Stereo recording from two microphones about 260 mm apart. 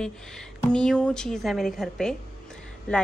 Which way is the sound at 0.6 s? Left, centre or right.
Centre.